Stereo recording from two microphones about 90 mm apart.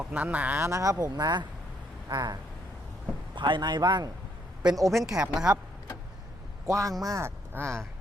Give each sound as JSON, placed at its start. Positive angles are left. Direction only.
{"t": 0.0, "sound": "speech", "side_deg": -15}
{"t": 0.6, "sound": "a man's voice", "side_deg": -35}
{"t": 3.3, "sound": "a man's voice", "side_deg": -60}
{"t": 4.9, "sound": "speech", "side_deg": -5}
{"t": 6.7, "sound": "speech", "side_deg": -35}